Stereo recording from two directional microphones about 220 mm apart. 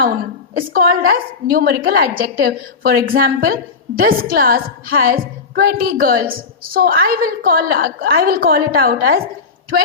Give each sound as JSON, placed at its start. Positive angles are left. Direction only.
{"t": 0.5, "sound": "a woman's voice", "side_deg": -40}